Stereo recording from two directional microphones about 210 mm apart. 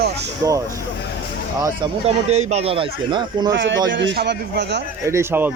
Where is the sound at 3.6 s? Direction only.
60° right (ahead or behind).